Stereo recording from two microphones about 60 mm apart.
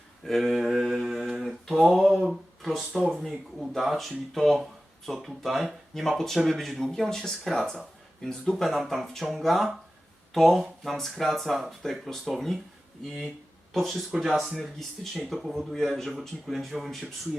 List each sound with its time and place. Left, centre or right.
0.3 s mantra: centre
3.1 s speech: centre
13.7 s speech: centre